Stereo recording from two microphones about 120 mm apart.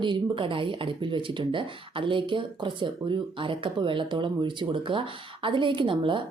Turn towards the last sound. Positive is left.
turn(degrees=-45)  # may be behind; listen again after turning